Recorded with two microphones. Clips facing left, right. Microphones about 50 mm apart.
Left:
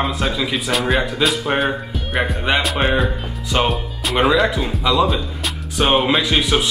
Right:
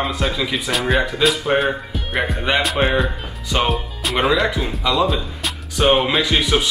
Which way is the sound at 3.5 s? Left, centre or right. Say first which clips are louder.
Left 1 dB; centre.